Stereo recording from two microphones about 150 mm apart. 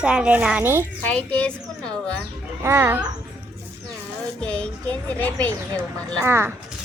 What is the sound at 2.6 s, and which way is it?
Speech, 15° right (ahead or behind).